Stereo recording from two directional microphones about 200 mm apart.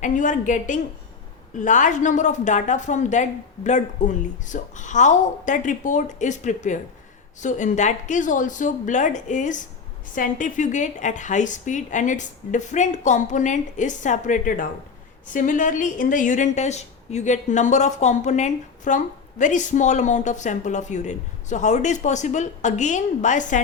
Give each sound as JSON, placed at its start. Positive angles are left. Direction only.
{"t": 0.0, "sound": "a woman's voice", "side_deg": 40}